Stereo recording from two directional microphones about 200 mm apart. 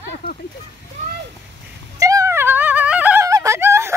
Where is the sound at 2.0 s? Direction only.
15° right (ahead or behind).